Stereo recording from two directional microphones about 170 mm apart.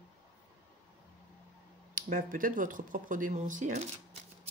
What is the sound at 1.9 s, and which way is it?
Speech, 50° right (ahead or behind).